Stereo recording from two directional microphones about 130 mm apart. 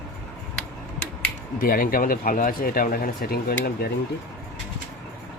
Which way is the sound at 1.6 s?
90° left.